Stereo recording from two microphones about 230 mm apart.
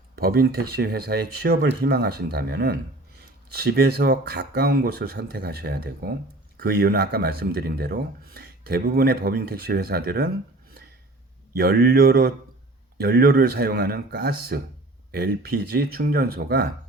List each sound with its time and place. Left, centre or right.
0.2 s speech: right
11.5 s speech: right